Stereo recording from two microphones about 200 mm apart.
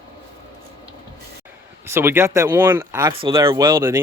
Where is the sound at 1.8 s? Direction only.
10° right (ahead or behind).